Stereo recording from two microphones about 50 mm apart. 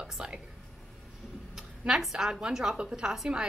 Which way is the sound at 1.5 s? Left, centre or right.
Centre.